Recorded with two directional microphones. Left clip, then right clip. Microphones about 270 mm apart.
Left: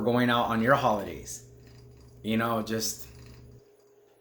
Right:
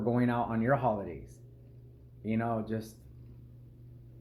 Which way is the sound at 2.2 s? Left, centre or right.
Centre.